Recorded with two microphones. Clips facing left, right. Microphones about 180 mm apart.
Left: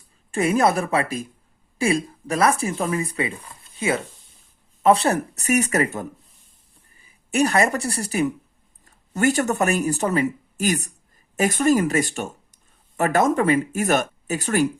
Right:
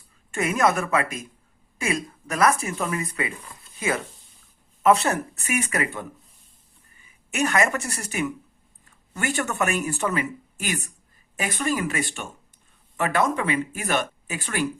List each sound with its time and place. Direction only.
0.3 s speech: 30° left (ahead or behind)